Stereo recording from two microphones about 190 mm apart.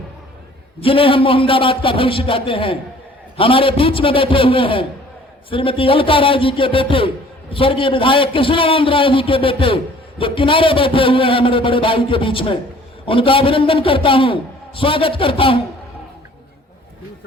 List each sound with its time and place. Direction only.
0.8 s a man's voice: 30° left (ahead or behind)